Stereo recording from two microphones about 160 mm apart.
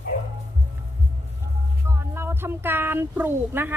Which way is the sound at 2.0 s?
15° right (ahead or behind).